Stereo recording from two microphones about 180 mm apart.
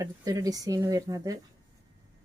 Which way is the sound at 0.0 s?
20° right (ahead or behind).